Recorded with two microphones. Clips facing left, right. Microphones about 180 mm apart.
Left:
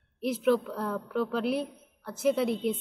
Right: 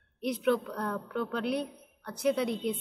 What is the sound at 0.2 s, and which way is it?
A woman's voice, 5° left (ahead or behind).